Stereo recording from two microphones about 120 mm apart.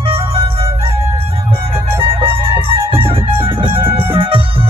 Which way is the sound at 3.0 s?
50° right (ahead or behind).